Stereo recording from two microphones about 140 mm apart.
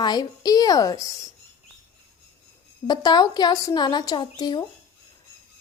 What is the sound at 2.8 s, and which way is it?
A woman's voice, 30° left (ahead or behind).